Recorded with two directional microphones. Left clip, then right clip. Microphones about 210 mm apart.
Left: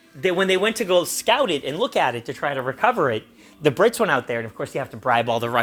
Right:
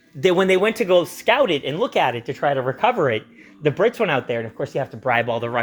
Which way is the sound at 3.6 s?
25° left (ahead or behind).